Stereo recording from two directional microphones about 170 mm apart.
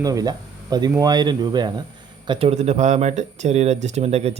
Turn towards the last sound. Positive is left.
turn(degrees=-40)  # may be behind; listen again after turning